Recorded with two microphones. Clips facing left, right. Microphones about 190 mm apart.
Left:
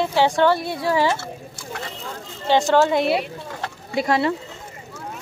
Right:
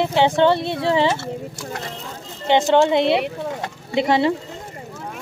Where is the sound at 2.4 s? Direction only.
20° right (ahead or behind).